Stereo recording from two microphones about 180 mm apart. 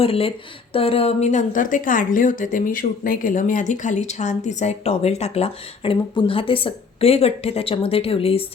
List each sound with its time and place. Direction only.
0.0 s speech: 30° left (ahead or behind)